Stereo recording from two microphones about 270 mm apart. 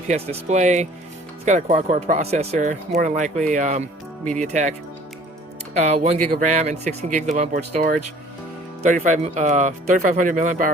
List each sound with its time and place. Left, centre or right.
0.1 s speech: right
5.7 s speech: right